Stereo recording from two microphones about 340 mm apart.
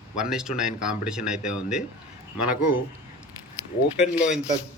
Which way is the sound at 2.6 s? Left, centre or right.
Left.